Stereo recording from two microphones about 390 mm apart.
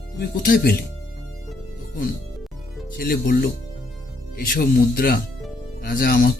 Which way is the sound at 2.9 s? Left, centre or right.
Left.